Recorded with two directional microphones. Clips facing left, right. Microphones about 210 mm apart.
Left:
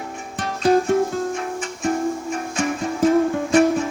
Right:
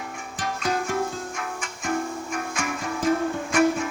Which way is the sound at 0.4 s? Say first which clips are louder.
Left 10 dB; 30° left (ahead or behind).